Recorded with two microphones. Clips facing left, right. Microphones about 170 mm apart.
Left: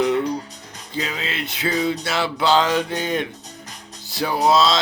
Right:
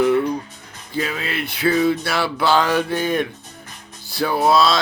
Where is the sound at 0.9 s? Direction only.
25° left (ahead or behind).